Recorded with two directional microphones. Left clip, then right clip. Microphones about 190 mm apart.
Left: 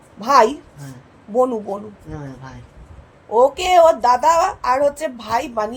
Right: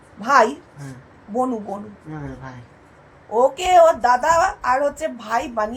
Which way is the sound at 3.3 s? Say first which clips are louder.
Left 1 dB; 35° left (ahead or behind).